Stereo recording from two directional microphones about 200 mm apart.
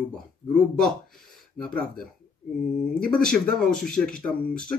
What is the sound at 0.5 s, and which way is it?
Speech, 5° left (ahead or behind).